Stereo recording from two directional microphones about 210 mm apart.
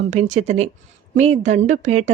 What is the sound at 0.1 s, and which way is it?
A woman's voice, 35° right (ahead or behind).